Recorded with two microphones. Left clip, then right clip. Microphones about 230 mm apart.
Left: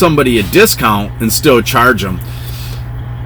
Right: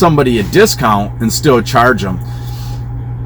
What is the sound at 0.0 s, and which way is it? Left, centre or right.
A man's voice, left.